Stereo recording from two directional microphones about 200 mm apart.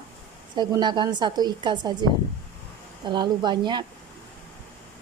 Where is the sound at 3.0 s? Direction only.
20° right (ahead or behind).